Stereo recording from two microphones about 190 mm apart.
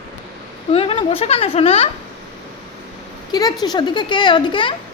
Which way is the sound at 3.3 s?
20° left (ahead or behind).